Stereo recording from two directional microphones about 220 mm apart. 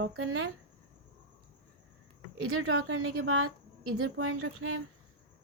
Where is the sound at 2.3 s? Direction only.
70° right (ahead or behind).